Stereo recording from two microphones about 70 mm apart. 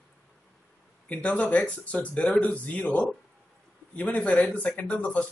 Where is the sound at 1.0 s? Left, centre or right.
Centre.